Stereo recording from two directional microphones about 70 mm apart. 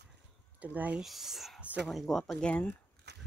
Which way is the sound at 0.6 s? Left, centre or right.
Right.